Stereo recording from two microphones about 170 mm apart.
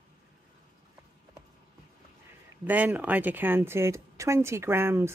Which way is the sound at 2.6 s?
10° right (ahead or behind).